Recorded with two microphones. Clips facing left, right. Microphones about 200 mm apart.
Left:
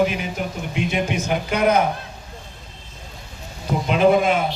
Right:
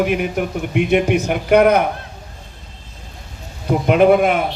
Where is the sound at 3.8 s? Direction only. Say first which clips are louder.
Right 4 dB; 60° right (ahead or behind).